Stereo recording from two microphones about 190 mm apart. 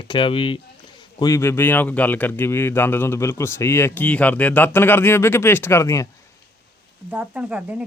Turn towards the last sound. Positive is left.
turn(degrees=-5)  # may be behind; listen again after turning